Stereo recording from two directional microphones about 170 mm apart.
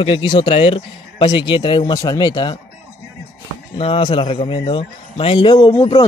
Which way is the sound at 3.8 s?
35° left (ahead or behind).